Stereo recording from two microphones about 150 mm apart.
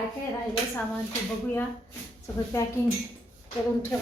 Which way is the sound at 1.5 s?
20° left (ahead or behind).